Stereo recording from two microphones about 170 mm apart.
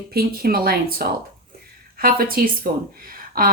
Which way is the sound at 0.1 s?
65° right (ahead or behind).